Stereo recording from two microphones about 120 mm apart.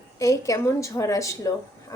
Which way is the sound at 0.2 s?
25° left (ahead or behind).